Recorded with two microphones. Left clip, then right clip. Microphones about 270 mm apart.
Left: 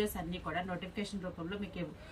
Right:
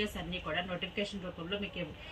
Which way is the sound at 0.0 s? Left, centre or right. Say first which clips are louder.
Even; centre.